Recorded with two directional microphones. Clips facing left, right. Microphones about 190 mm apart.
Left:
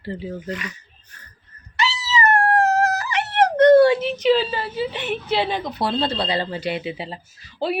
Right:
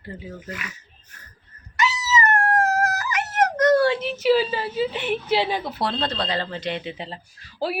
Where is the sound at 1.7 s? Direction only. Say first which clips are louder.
Right 1 dB; 30° left (ahead or behind).